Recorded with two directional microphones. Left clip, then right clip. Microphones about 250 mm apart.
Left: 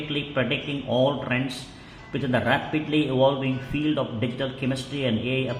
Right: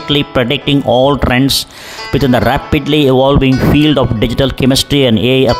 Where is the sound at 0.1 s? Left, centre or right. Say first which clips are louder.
Right 14 dB; right.